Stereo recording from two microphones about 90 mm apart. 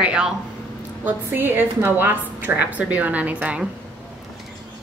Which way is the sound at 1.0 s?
25° right (ahead or behind).